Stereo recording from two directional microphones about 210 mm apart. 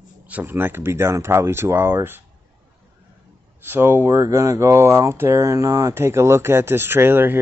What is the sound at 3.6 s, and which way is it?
Speech, 10° right (ahead or behind).